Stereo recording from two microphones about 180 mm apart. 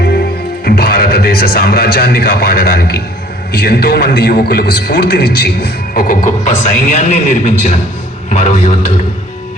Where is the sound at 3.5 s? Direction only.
60° left (ahead or behind).